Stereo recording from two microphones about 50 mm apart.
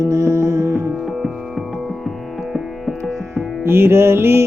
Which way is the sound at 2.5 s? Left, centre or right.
Centre.